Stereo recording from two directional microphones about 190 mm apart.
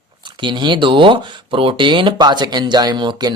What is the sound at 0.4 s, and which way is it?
Speech, 25° right (ahead or behind).